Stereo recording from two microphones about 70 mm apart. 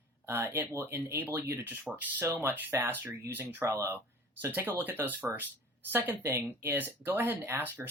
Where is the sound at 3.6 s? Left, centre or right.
Right.